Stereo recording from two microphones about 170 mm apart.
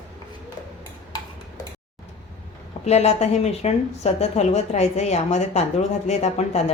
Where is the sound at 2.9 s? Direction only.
40° left (ahead or behind).